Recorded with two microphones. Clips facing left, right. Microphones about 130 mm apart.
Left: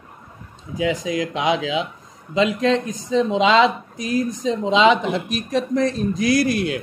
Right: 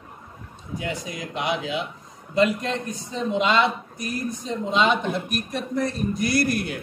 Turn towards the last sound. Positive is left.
turn(degrees=90)